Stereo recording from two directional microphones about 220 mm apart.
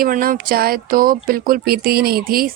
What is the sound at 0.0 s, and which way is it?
Speech, 40° right (ahead or behind).